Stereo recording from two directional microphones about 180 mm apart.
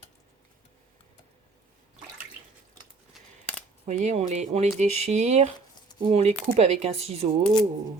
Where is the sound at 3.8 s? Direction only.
40° right (ahead or behind).